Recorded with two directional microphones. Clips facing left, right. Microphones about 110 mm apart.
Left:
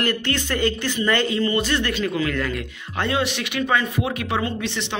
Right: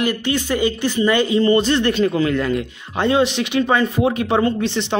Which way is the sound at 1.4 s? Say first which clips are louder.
Right 6 dB; 30° right (ahead or behind).